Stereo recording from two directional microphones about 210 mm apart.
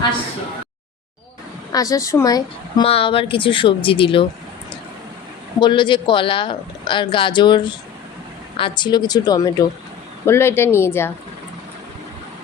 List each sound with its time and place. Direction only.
1.7 s a woman's voice: 15° left (ahead or behind)
5.5 s a woman's voice: 20° left (ahead or behind)